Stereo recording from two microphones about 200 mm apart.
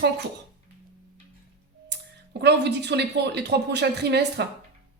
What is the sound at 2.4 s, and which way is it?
A woman's voice, 55° right (ahead or behind).